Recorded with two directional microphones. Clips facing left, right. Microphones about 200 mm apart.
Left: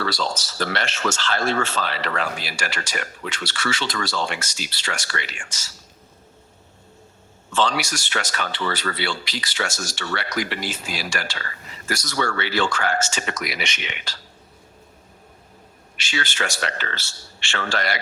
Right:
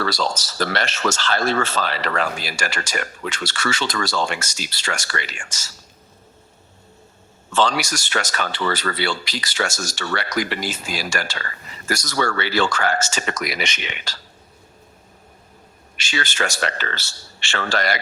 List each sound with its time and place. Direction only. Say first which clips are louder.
0.0 s speech: right 2 dB; 40° right (ahead or behind)
7.5 s speech: right 2 dB; 45° right (ahead or behind)
16.0 s speech: right 2 dB; 40° right (ahead or behind)